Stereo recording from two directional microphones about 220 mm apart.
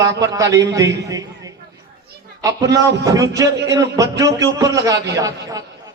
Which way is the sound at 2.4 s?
15° right (ahead or behind).